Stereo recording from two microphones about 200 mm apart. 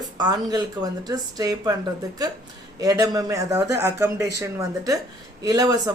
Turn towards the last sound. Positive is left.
turn(degrees=-20)  # may be behind; listen again after turning